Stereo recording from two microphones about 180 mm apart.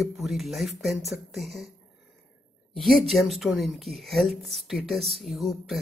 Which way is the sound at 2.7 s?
Centre (ahead or behind).